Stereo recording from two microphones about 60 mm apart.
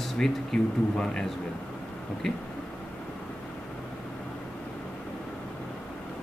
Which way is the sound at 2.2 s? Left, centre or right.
Centre.